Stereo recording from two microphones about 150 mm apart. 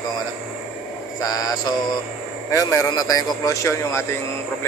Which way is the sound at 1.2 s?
25° left (ahead or behind).